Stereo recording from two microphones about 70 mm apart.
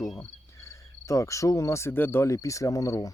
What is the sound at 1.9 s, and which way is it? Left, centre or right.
Speech, left.